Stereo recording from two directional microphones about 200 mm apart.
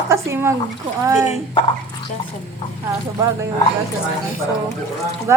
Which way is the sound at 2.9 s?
15° right (ahead or behind).